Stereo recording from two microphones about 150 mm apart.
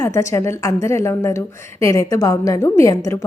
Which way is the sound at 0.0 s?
20° left (ahead or behind).